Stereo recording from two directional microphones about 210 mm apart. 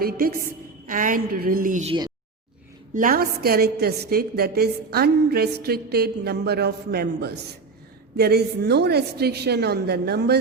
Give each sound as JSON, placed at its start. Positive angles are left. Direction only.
{"t": 0.0, "sound": "a woman's voice", "side_deg": -45}
{"t": 2.9, "sound": "a woman's voice", "side_deg": -40}